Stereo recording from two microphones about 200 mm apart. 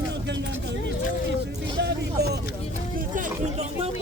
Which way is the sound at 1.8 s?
55° right (ahead or behind).